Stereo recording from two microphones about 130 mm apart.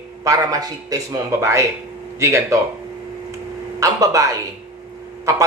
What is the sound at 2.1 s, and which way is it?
Speech, 25° right (ahead or behind).